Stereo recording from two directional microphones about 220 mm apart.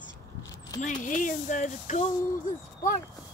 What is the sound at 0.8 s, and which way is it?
Speech, 35° left (ahead or behind).